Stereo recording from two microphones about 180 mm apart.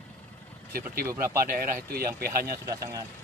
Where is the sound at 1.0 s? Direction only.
15° right (ahead or behind).